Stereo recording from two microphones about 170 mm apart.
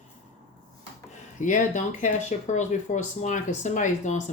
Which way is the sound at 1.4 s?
45° left (ahead or behind).